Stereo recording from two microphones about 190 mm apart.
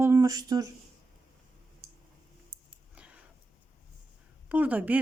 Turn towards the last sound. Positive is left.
turn(degrees=-10)  # may be behind; listen again after turning